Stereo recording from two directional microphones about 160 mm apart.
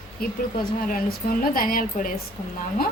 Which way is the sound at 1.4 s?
60° left (ahead or behind).